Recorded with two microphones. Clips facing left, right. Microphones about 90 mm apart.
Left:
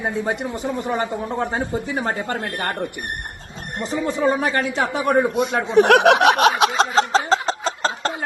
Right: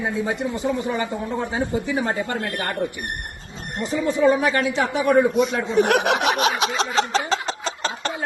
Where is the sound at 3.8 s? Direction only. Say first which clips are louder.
Right 2 dB; 40° left (ahead or behind).